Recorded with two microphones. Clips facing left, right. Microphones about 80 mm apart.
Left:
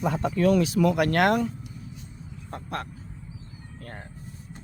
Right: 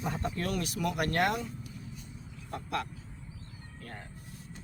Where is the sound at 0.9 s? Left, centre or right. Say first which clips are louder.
Left 8 dB; left.